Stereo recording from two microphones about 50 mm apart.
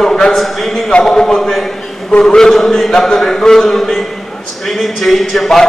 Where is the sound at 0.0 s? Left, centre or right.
Centre.